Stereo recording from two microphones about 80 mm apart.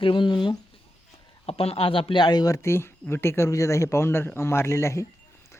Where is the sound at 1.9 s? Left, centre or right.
Left.